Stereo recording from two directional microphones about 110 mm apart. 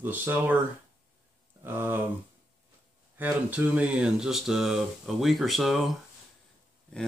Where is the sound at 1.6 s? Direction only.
20° right (ahead or behind).